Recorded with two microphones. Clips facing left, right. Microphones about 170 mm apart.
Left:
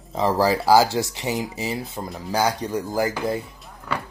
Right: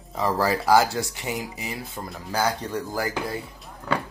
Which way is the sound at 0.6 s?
30° left (ahead or behind).